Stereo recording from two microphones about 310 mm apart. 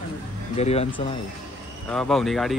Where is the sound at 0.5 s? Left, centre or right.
Left.